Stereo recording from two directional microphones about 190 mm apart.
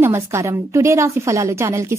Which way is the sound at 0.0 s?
15° right (ahead or behind).